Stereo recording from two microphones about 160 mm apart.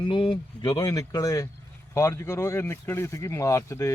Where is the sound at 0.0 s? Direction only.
30° left (ahead or behind).